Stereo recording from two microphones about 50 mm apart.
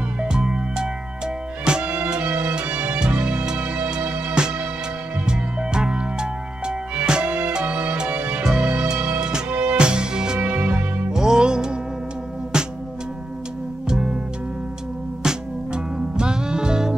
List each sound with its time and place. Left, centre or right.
0.2 s music: centre
7.2 s music: right
10.5 s music: right
13.8 s music: centre
15.2 s music: centre